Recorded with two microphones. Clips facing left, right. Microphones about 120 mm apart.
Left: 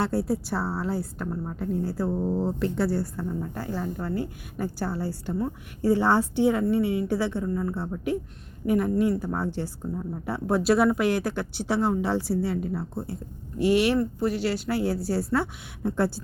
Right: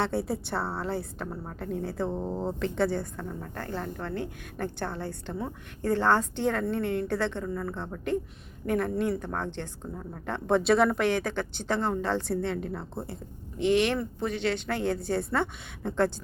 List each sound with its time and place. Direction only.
0.0 s speech: centre (ahead or behind)
2.0 s speech: 20° right (ahead or behind)
2.3 s speech: centre (ahead or behind)